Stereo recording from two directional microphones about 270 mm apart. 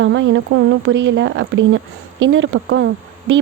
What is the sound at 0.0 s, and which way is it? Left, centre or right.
Speech, right.